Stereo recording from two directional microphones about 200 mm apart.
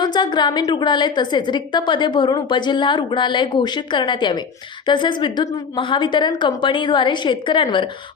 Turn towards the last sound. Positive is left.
turn(degrees=25)  # may be behind; listen again after turning